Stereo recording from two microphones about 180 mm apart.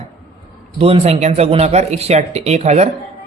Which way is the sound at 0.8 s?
35° right (ahead or behind).